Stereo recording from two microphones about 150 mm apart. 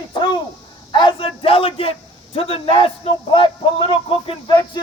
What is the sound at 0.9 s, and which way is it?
A man's voice, 30° left (ahead or behind).